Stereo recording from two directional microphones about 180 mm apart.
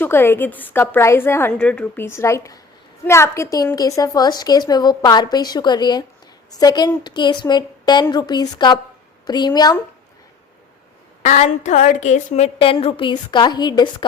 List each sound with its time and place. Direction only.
0.0 s a woman's voice: 10° left (ahead or behind)
11.2 s a woman's voice: 40° left (ahead or behind); by 13.9 s 25° left (ahead or behind)